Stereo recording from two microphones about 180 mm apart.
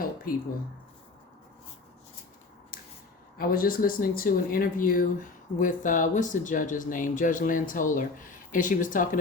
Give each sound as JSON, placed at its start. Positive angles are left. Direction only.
{"t": 2.7, "sound": "scissors", "side_deg": 55}
{"t": 3.3, "sound": "speech", "side_deg": 55}